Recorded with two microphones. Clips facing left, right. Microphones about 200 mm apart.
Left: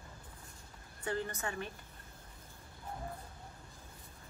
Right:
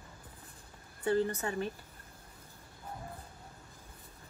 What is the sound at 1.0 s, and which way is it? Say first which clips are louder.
Speech: right 7 dB; 35° right (ahead or behind).